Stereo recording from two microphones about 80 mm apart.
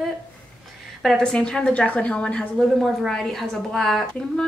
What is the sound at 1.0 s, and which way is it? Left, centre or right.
A woman's voice, centre.